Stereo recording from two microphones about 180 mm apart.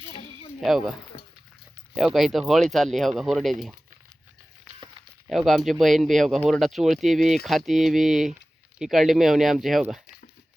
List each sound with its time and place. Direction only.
0.6 s speech: centre (ahead or behind)
1.1 s a sound: 35° left (ahead or behind)
2.0 s speech: centre (ahead or behind)
5.3 s speech: centre (ahead or behind)